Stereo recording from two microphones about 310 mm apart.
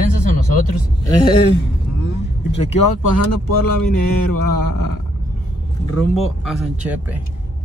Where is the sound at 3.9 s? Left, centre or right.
Left.